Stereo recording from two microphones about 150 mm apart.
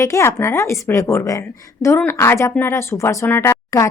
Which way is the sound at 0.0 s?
20° left (ahead or behind).